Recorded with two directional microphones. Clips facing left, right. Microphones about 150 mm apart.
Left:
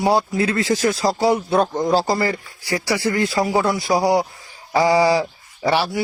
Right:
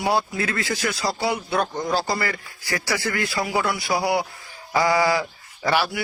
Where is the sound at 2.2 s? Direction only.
25° left (ahead or behind).